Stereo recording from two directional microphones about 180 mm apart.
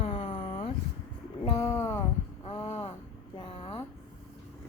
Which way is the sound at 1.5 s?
15° left (ahead or behind).